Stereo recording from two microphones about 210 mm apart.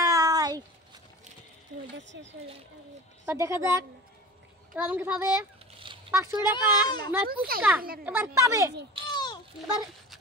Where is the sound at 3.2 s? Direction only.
15° right (ahead or behind).